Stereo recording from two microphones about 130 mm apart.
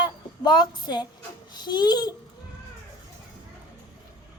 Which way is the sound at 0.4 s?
35° left (ahead or behind).